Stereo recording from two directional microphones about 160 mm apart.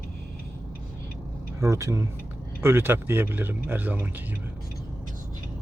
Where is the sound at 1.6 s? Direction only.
20° right (ahead or behind).